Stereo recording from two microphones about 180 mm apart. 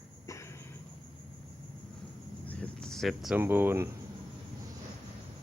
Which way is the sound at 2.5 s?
5° left (ahead or behind).